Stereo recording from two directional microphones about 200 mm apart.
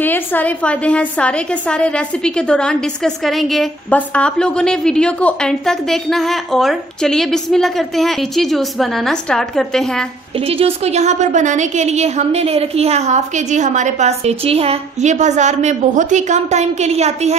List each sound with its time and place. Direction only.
0.0 s a woman's voice: 10° left (ahead or behind)
10.4 s a woman's voice: 30° right (ahead or behind)